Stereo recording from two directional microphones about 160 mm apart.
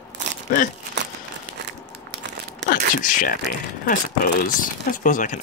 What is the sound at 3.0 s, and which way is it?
Speech, 60° left (ahead or behind).